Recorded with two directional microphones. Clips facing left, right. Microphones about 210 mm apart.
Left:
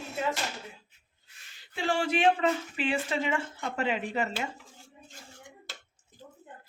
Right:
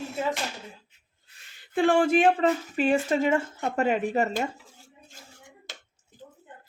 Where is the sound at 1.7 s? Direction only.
55° right (ahead or behind).